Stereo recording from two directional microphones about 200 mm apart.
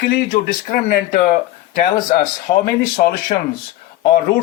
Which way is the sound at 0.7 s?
40° left (ahead or behind).